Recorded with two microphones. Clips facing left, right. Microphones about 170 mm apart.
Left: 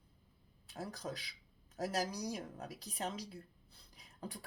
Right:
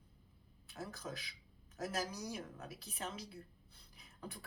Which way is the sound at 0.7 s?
35° left (ahead or behind).